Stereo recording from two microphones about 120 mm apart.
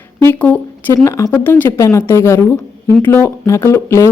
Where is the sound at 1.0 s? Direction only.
25° left (ahead or behind).